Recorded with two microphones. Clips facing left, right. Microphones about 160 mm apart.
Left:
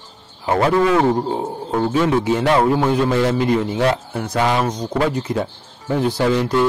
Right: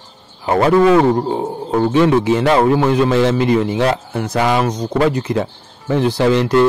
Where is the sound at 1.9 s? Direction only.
85° right.